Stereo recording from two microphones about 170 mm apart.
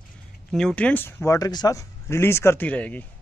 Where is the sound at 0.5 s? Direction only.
5° left (ahead or behind).